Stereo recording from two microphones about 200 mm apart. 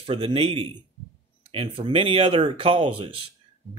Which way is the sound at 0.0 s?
30° right (ahead or behind).